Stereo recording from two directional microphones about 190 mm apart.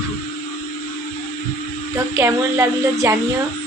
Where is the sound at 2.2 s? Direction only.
15° right (ahead or behind).